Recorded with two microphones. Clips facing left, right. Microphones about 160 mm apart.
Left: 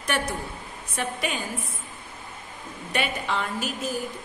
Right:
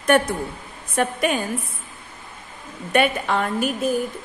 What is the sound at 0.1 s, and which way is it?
A woman's voice, 55° right (ahead or behind).